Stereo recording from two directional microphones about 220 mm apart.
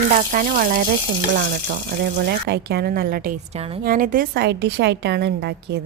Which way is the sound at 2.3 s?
45° right (ahead or behind).